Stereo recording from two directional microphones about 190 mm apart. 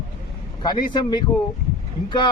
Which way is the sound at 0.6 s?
25° left (ahead or behind).